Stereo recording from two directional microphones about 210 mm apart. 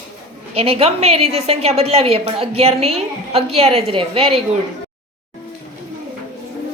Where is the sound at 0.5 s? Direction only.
30° right (ahead or behind).